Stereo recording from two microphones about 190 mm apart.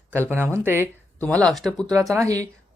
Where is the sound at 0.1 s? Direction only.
10° right (ahead or behind).